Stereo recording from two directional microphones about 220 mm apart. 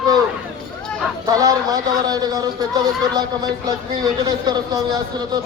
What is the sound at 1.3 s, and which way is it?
A man's voice, 15° right (ahead or behind).